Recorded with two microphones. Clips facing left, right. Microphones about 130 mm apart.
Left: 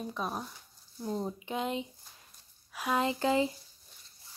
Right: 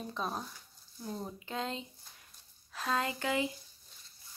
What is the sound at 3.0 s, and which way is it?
Speech, 30° left (ahead or behind).